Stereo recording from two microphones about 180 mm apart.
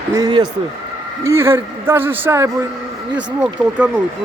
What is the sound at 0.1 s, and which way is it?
A man's voice, 20° right (ahead or behind).